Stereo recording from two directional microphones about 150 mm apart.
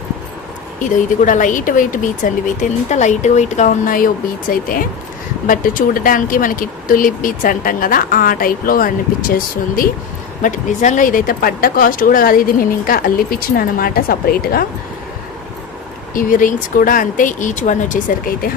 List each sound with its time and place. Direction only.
0.8 s speech: 60° left (ahead or behind)
10.4 s speech: 55° left (ahead or behind); by 14.7 s 85° left
16.1 s speech: 65° left (ahead or behind)